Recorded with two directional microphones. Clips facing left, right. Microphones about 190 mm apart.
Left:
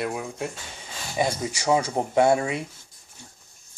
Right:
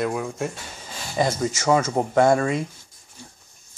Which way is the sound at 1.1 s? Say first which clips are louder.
Right 3 dB; 10° left (ahead or behind).